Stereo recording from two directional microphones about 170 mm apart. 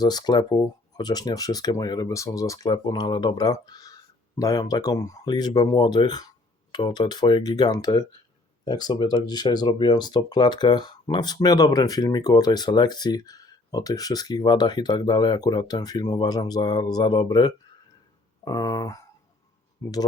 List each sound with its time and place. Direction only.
0.0 s speech: 25° left (ahead or behind)